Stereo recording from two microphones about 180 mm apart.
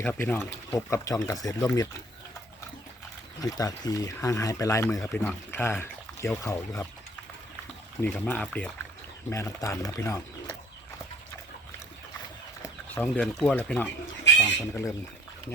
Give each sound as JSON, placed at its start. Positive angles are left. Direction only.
{"t": 0.0, "sound": "speech", "side_deg": 5}
{"t": 3.4, "sound": "speech", "side_deg": 20}
{"t": 8.0, "sound": "speech", "side_deg": 10}
{"t": 9.3, "sound": "speech", "side_deg": 15}
{"t": 12.9, "sound": "speech", "side_deg": 10}